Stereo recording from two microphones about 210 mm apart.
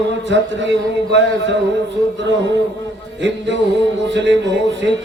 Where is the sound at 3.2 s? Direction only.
55° right (ahead or behind).